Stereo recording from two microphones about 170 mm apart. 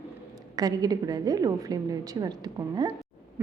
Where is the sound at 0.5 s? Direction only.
20° right (ahead or behind).